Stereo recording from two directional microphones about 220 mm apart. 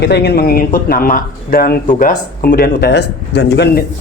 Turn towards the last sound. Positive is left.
turn(degrees=50)  # may be behind; listen again after turning